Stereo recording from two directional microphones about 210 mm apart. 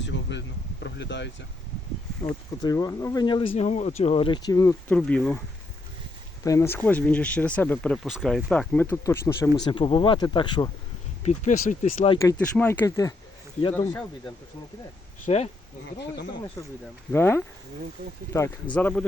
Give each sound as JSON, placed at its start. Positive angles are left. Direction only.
{"t": 0.0, "sound": "speech", "side_deg": 60}
{"t": 2.6, "sound": "speech", "side_deg": 15}
{"t": 4.9, "sound": "speech", "side_deg": 5}
{"t": 6.4, "sound": "speech", "side_deg": 15}
{"t": 11.2, "sound": "speech", "side_deg": 35}
{"t": 12.2, "sound": "speech", "side_deg": 10}
{"t": 15.3, "sound": "speech", "side_deg": 30}
{"t": 17.1, "sound": "speech", "side_deg": 10}